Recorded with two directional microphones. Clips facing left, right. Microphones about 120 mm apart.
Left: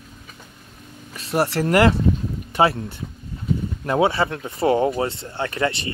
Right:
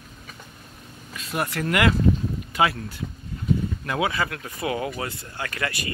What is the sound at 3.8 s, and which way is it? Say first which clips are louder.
Speech: left 9 dB; 30° left (ahead or behind).